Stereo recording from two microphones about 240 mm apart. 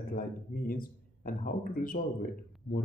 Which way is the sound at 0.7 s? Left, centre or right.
Left.